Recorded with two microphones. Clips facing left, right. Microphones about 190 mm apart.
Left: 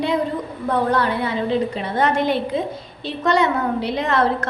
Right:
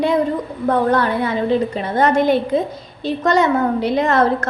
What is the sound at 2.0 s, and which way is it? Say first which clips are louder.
A woman's voice: right 4 dB; 45° right (ahead or behind).